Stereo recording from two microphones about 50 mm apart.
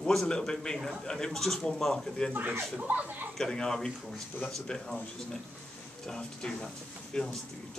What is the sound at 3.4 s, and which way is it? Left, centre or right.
Speech, centre.